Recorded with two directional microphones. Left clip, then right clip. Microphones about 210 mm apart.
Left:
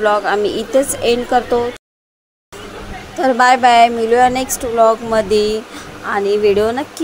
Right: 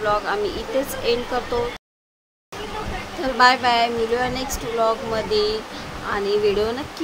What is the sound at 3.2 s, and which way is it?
Speech, 35° left (ahead or behind).